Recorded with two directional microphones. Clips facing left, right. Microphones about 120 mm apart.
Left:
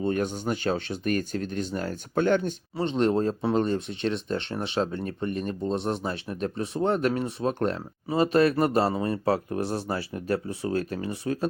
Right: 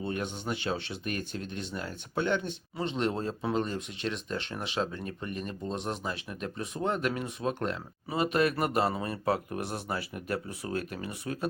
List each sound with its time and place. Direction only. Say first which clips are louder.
0.0 s speech: left 7 dB; 40° left (ahead or behind)